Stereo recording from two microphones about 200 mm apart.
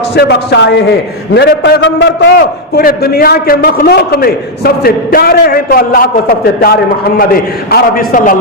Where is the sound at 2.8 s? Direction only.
50° left (ahead or behind).